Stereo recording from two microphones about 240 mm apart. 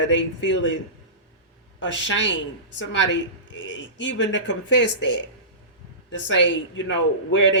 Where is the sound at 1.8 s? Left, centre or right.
Left.